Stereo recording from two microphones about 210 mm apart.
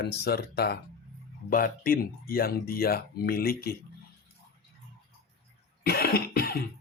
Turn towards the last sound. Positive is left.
turn(degrees=45)  # may be behind; listen again after turning